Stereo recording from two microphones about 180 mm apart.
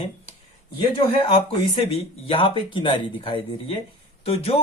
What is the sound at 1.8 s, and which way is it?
Speech, 30° left (ahead or behind).